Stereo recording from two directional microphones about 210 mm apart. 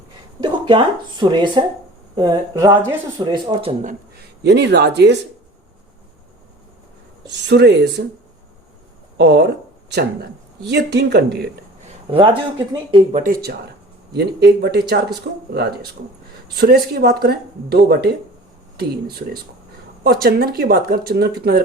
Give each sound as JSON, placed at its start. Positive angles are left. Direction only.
{"t": 0.3, "sound": "speech", "side_deg": -20}
{"t": 3.8, "sound": "speech", "side_deg": -50}
{"t": 7.3, "sound": "speech", "side_deg": -55}
{"t": 9.1, "sound": "speech", "side_deg": -50}
{"t": 10.7, "sound": "speech", "side_deg": -50}
{"t": 12.0, "sound": "speech", "side_deg": -25}